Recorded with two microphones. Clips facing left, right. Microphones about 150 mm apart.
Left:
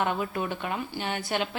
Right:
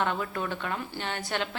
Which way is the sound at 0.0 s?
15° left (ahead or behind).